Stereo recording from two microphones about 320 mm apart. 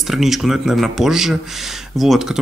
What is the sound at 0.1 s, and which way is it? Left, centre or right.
Speech, centre.